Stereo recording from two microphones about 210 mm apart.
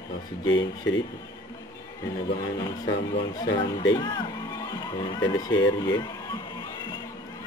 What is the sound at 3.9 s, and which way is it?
Speech, 20° left (ahead or behind).